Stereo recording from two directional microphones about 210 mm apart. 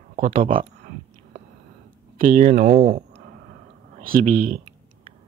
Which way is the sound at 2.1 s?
35° right (ahead or behind).